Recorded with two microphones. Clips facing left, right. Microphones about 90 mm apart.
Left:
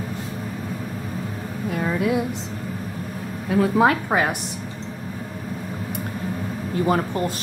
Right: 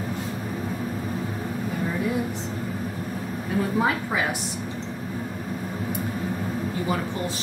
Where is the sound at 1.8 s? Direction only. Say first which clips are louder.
Left 6 dB; 90° left.